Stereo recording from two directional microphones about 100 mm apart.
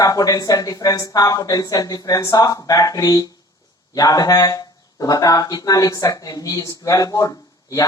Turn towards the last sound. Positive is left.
turn(degrees=35)  # may be behind; listen again after turning